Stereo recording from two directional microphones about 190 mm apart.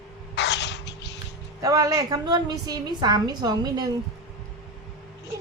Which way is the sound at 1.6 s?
20° right (ahead or behind).